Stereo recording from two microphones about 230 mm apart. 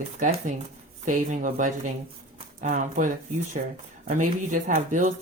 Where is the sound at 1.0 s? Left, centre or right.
Right.